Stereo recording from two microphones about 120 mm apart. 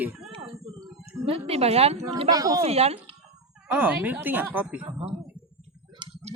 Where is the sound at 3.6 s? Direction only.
15° right (ahead or behind).